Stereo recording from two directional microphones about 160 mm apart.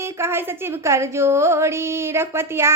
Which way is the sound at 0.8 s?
15° right (ahead or behind).